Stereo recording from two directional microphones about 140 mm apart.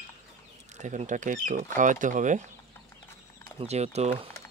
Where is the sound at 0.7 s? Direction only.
60° right (ahead or behind).